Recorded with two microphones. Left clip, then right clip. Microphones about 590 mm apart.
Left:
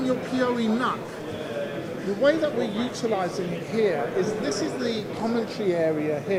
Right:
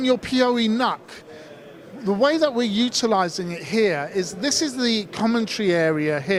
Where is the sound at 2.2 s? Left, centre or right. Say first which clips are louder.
Right 2 dB; right.